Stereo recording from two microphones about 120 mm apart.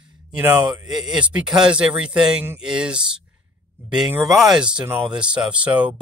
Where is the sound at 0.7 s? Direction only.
35° right (ahead or behind).